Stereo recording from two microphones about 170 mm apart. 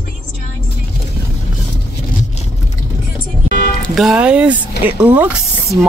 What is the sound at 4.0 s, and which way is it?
Speech, 5° right (ahead or behind).